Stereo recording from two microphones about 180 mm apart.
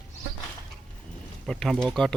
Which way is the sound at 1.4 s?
5° left (ahead or behind).